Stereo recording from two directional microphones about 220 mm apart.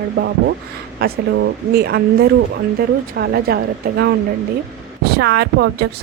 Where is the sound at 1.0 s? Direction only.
50° right (ahead or behind).